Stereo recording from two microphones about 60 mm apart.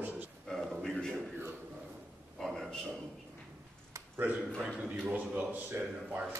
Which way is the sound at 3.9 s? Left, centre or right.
Right.